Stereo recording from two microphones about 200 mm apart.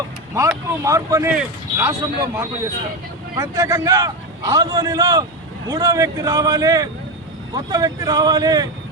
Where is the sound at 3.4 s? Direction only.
15° right (ahead or behind).